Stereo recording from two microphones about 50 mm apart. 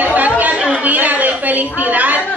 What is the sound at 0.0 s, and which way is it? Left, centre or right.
Chatter, right.